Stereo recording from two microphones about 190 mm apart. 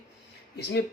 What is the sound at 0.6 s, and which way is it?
Speech, 60° left (ahead or behind).